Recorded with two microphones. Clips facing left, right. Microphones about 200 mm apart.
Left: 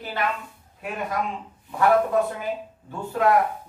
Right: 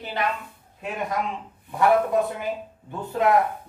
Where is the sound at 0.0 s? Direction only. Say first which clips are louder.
Even; 20° right (ahead or behind).